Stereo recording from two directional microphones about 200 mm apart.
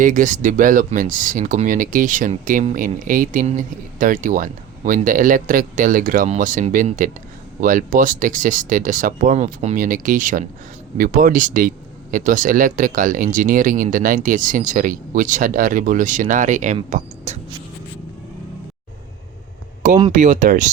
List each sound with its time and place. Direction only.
0.0 s speech: 40° right (ahead or behind)
20.1 s speech: 35° right (ahead or behind)